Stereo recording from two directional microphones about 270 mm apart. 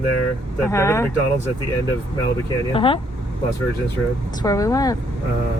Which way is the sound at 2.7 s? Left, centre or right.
Centre.